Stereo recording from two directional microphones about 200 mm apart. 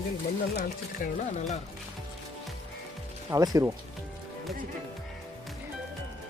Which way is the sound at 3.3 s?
15° right (ahead or behind).